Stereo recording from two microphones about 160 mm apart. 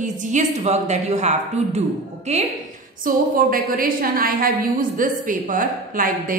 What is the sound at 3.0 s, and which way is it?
A woman's voice, 65° right (ahead or behind).